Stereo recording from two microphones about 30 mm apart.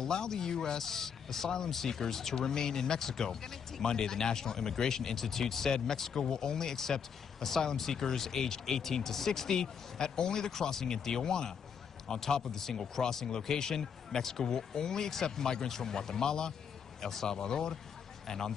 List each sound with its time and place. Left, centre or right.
0.0 s speech: left
9.5 s speech: left
12.5 s speech: centre